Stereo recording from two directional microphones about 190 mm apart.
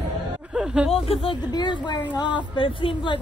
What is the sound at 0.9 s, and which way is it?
Speech, 30° left (ahead or behind).